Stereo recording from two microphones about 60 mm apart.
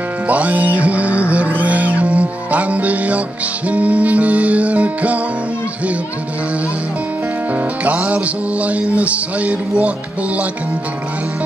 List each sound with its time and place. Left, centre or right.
0.3 s music: right
7.8 s music: right